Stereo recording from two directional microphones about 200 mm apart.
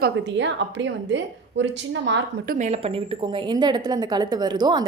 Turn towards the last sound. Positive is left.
turn(degrees=-20)  # may be behind; listen again after turning